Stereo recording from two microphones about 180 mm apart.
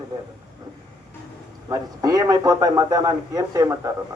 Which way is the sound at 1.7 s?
20° right (ahead or behind).